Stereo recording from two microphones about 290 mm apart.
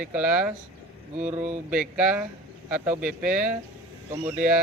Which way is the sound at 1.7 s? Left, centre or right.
Centre.